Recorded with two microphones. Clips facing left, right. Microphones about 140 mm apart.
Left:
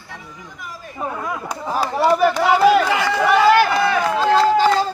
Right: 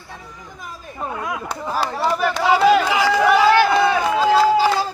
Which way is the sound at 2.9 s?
10° right (ahead or behind).